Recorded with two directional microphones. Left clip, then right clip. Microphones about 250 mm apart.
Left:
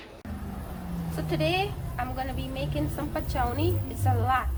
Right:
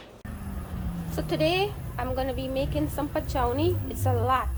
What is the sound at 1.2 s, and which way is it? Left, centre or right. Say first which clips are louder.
A woman's voice: right 2 dB; right.